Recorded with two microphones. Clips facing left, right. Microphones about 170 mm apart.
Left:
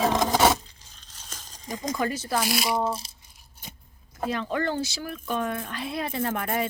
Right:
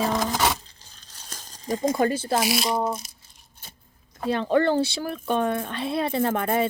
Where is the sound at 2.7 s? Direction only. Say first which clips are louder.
Right 1 dB; 30° left (ahead or behind).